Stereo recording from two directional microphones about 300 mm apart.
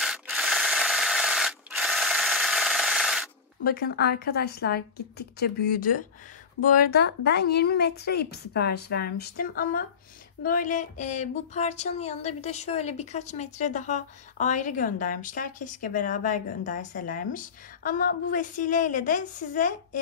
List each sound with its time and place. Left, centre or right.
0.0 s rub: centre
3.6 s speech: left